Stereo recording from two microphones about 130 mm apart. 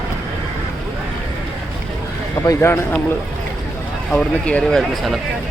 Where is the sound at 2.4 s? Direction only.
20° left (ahead or behind).